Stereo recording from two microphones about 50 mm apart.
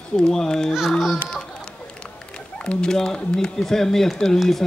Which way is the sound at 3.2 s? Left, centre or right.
Centre.